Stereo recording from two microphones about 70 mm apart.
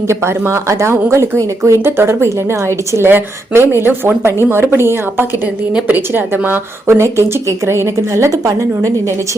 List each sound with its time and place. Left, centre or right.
0.1 s a woman's voice: right
1.4 s speech: right
1.8 s a woman's voice: right
6.8 s speech: right